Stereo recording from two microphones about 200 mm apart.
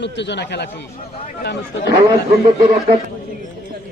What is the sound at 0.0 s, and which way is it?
A man's voice, 60° left (ahead or behind).